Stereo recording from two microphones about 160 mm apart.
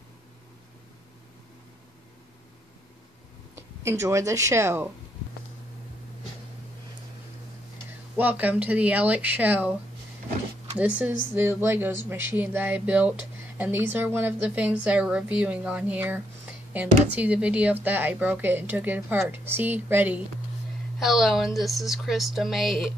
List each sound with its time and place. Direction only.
3.5 s speech: 15° right (ahead or behind)
8.2 s speech: 10° right (ahead or behind)
10.8 s speech: 10° right (ahead or behind)